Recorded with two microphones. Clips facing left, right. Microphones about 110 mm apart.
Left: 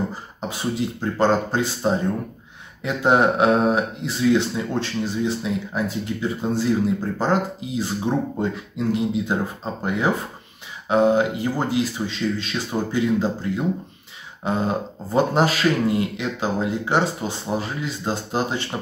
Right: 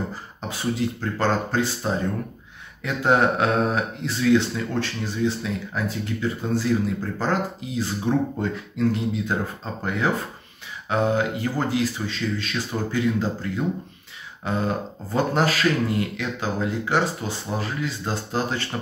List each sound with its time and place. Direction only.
0.4 s speech: 20° left (ahead or behind)